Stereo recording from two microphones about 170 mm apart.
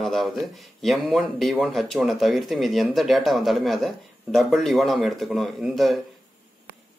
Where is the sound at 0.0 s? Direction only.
Centre (ahead or behind).